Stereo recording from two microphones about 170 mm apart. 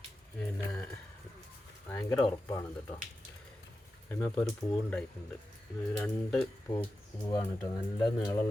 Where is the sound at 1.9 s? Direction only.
15° left (ahead or behind).